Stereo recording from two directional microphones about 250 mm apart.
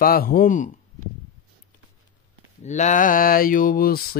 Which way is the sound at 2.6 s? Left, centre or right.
Left.